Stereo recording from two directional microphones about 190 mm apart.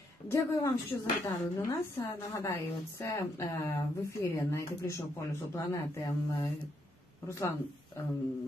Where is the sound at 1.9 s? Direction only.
15° left (ahead or behind).